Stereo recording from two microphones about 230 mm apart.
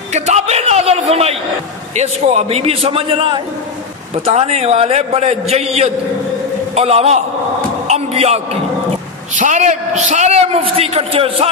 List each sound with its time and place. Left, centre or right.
0.1 s a man's voice: right
7.9 s a sound: right
9.3 s a man's voice: right